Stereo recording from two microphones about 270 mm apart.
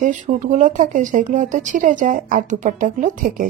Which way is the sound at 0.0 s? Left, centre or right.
Right.